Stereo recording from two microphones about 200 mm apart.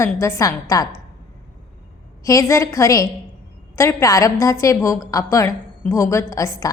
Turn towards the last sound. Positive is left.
turn(degrees=15)  # may be behind; listen again after turning